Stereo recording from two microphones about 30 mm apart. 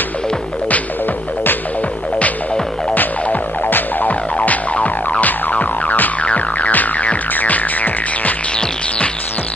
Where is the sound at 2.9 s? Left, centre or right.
Left.